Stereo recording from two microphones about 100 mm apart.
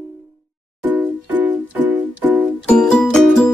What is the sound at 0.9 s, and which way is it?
Music, 15° right (ahead or behind).